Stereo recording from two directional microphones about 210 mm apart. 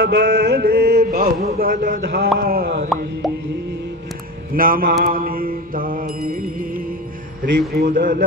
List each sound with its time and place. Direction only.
0.0 s mantra: 50° right (ahead or behind)
4.6 s mantra: 45° right (ahead or behind)